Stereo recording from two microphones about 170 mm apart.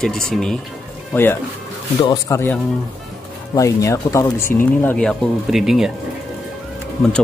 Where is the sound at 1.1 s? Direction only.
15° left (ahead or behind); by 5.9 s centre (ahead or behind).